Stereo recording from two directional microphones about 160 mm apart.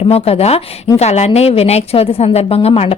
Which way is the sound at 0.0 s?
40° left (ahead or behind).